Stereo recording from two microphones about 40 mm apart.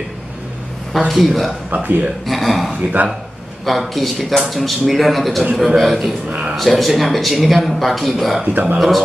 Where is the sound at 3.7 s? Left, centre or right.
Centre.